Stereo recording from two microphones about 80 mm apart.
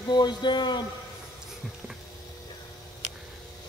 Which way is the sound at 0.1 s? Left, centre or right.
Left.